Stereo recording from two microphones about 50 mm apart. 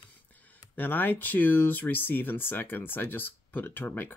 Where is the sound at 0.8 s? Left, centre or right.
Left.